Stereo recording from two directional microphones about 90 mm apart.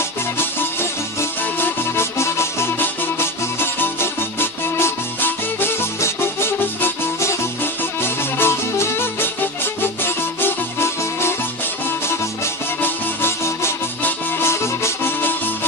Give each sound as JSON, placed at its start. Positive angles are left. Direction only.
{"t": 0.4, "sound": "music", "side_deg": 25}
{"t": 13.2, "sound": "music", "side_deg": 25}